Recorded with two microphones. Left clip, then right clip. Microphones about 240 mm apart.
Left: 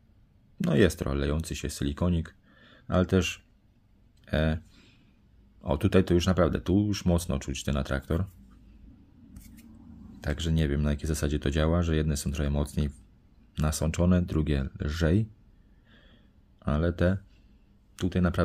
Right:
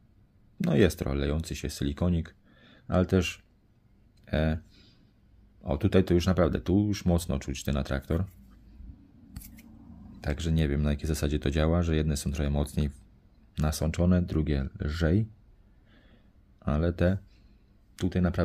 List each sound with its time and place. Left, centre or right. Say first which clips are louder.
0.6 s speech: left 1 dB; centre
4.2 s a sound: left 1 dB; centre
5.6 s speech: left 1 dB; centre
10.2 s speech: even; centre
15.9 s a sound: left 3 dB; centre
17.9 s speech: left 1 dB; centre